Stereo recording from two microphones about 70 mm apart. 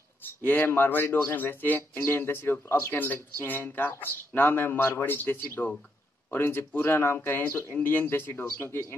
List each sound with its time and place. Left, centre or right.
0.2 s speech: left